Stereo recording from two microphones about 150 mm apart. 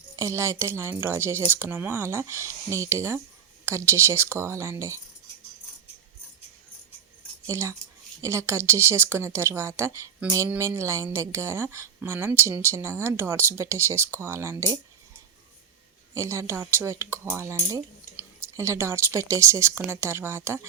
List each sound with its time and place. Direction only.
0.2 s speech: 20° right (ahead or behind)
7.4 s speech: 20° right (ahead or behind)
16.1 s speech: 20° right (ahead or behind)